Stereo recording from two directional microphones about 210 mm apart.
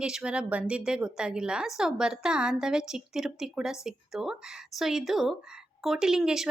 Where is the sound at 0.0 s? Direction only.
5° right (ahead or behind).